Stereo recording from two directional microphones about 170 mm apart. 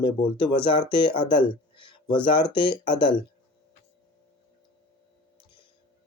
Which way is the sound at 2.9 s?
30° left (ahead or behind).